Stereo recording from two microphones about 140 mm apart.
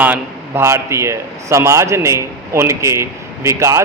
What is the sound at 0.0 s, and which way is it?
A man's voice, 15° right (ahead or behind).